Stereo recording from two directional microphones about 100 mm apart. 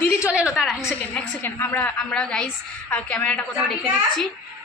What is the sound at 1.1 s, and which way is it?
Speech, 20° left (ahead or behind).